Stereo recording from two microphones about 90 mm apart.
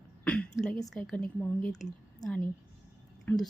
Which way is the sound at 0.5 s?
5° left (ahead or behind).